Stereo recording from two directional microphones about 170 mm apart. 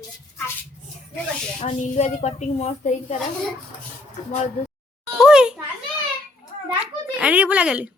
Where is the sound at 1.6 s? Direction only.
40° left (ahead or behind).